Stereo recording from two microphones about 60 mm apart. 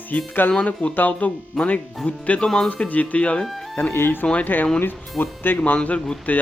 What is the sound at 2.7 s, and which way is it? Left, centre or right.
Speech, left.